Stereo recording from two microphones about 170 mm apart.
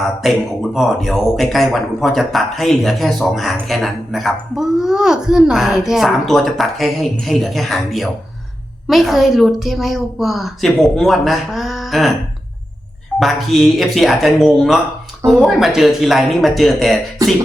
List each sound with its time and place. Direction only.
0.2 s a man's voice: centre (ahead or behind)
13.1 s a man's voice: centre (ahead or behind)
17.2 s beatboxing: 20° right (ahead or behind)